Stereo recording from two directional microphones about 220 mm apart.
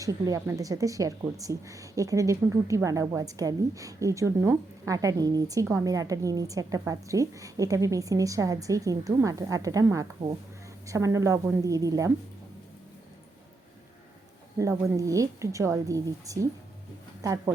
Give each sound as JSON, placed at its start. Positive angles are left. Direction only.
{"t": 0.0, "sound": "speech", "side_deg": -15}
{"t": 14.6, "sound": "speech", "side_deg": -15}